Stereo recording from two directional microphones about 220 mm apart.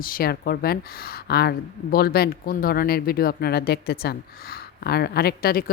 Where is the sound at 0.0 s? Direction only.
40° left (ahead or behind).